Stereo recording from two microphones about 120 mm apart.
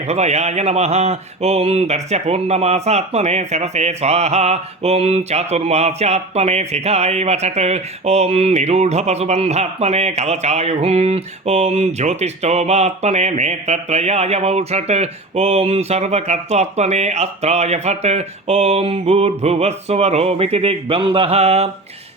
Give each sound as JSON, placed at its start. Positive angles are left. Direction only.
{"t": 0.1, "sound": "speech", "side_deg": -65}